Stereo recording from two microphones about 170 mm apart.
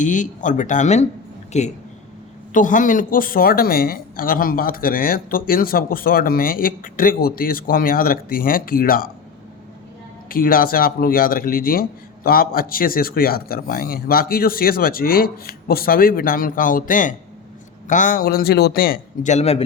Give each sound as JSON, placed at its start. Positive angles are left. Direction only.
{"t": 0.0, "sound": "a man's voice", "side_deg": 45}
{"t": 10.2, "sound": "a man's voice", "side_deg": 55}